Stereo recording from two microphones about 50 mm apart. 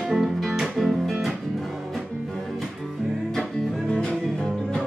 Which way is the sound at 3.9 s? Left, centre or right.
Centre.